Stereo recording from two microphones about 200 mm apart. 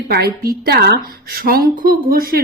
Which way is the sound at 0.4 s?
50° right (ahead or behind).